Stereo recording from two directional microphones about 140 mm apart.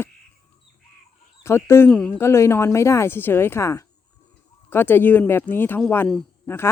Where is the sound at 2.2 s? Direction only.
20° left (ahead or behind).